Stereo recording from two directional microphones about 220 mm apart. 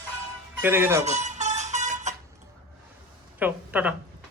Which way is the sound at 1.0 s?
30° right (ahead or behind).